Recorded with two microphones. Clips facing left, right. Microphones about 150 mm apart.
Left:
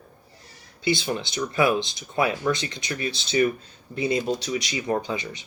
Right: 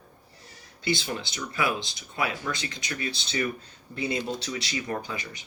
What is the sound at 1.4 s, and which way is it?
Speech, 25° left (ahead or behind).